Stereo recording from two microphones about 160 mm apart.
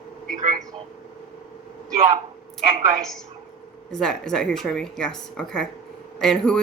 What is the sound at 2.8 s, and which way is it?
Speech, 50° right (ahead or behind).